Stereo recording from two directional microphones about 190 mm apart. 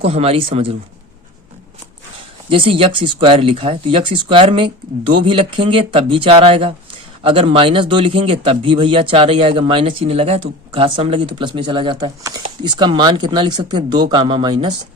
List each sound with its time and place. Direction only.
0.0 s speech: 30° right (ahead or behind)
2.5 s speech: 30° right (ahead or behind)